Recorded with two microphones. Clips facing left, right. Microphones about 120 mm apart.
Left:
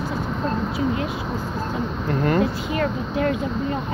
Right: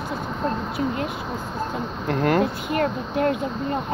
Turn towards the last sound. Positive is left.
turn(degrees=-50)  # may be behind; listen again after turning